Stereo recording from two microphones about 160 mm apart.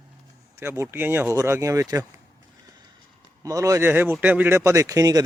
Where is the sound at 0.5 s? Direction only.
15° right (ahead or behind).